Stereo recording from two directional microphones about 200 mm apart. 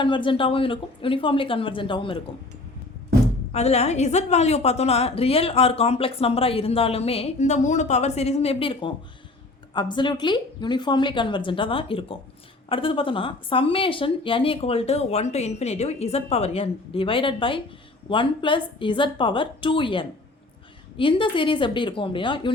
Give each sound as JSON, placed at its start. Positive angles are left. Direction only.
{"t": 0.0, "sound": "speech", "side_deg": 25}
{"t": 3.5, "sound": "a woman's voice", "side_deg": 30}